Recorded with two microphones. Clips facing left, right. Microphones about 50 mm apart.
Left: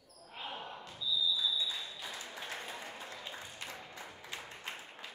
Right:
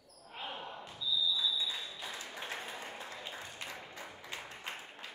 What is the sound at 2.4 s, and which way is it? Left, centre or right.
Applause, centre.